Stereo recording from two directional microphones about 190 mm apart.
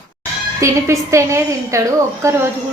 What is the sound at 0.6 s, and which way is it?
A woman's voice, 15° right (ahead or behind).